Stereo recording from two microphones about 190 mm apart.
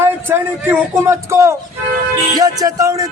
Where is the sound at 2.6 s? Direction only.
15° right (ahead or behind).